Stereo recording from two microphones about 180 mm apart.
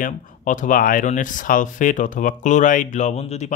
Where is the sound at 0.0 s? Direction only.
45° left (ahead or behind).